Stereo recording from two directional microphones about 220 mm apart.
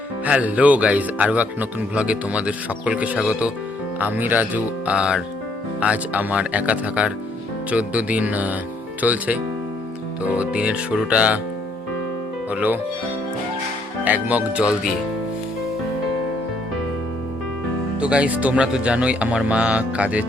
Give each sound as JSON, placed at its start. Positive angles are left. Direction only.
{"t": 0.3, "sound": "speech", "side_deg": -5}
{"t": 12.5, "sound": "speech", "side_deg": -5}
{"t": 14.0, "sound": "speech", "side_deg": -5}
{"t": 18.0, "sound": "speech", "side_deg": -5}